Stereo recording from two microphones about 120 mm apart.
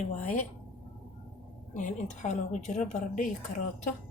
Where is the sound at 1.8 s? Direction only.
90° left.